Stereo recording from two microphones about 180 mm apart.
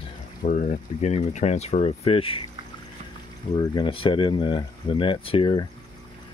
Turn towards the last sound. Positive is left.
turn(degrees=30)  # may be behind; listen again after turning